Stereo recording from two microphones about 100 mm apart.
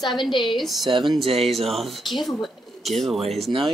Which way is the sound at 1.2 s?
75° right (ahead or behind).